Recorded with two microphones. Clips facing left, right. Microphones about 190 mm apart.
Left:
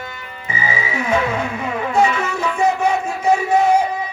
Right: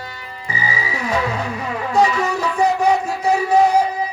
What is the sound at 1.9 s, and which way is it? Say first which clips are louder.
Music: right 1 dB; 35° right (ahead or behind).